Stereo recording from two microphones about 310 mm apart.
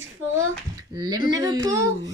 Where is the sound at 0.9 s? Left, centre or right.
Centre.